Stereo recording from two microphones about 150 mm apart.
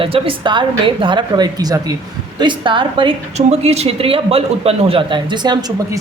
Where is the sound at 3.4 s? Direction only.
45° right (ahead or behind); by 6.0 s 25° right (ahead or behind).